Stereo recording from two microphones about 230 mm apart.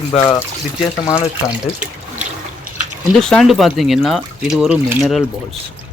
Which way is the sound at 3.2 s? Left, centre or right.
Centre.